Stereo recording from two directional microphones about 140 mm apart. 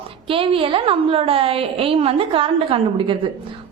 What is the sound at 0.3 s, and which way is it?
A woman's voice, 40° right (ahead or behind).